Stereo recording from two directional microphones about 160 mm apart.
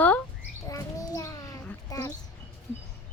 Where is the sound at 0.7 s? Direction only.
20° left (ahead or behind).